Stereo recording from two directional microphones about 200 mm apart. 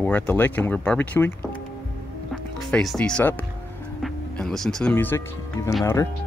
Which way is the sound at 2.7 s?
5° left (ahead or behind).